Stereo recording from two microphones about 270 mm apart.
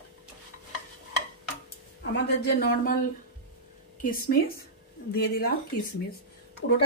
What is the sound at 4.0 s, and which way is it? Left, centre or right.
Speech, left.